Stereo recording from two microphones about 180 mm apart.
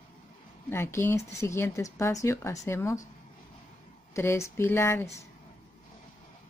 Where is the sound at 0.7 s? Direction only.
15° left (ahead or behind).